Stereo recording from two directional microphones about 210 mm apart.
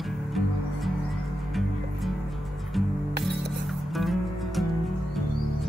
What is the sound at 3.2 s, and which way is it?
Music, centre (ahead or behind).